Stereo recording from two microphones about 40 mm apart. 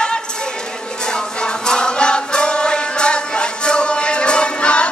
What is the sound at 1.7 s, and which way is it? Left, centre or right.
Chant, left.